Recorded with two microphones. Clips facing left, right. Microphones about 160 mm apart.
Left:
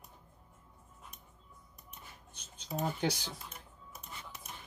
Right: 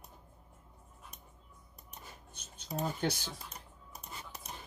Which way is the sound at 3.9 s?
35° right (ahead or behind).